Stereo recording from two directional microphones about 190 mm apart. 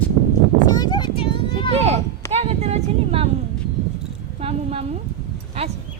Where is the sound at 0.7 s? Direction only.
20° left (ahead or behind).